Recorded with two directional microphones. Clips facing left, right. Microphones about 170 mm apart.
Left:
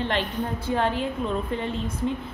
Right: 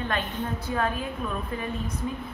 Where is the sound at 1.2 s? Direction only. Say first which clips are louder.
Left 4 dB; 25° left (ahead or behind).